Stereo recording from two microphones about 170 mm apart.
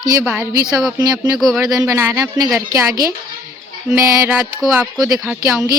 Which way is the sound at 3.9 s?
15° right (ahead or behind).